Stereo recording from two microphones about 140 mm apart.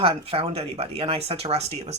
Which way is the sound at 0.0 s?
45° right (ahead or behind).